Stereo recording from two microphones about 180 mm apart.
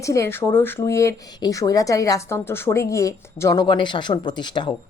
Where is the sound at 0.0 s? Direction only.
15° left (ahead or behind).